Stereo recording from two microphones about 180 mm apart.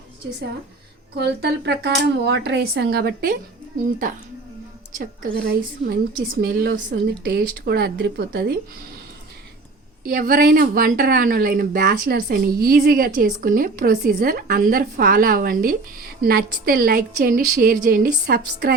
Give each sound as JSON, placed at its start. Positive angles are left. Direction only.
{"t": 1.1, "sound": "speech", "side_deg": -70}
{"t": 4.9, "sound": "a woman's voice", "side_deg": -50}
{"t": 10.1, "sound": "a woman's voice", "side_deg": -55}